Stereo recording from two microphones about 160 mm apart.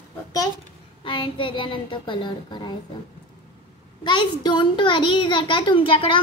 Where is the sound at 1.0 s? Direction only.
30° left (ahead or behind).